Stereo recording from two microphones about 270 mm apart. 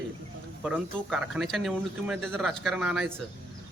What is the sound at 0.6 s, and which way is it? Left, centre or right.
Speech, centre.